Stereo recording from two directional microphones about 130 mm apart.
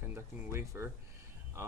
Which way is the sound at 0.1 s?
20° right (ahead or behind).